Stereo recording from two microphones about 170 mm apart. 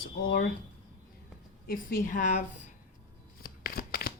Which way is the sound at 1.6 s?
60° left (ahead or behind).